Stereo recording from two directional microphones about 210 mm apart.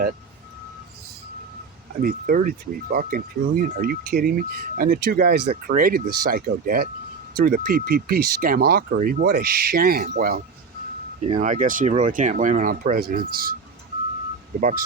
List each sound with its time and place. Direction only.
2.0 s speech: 45° right (ahead or behind)
14.6 s speech: 35° right (ahead or behind)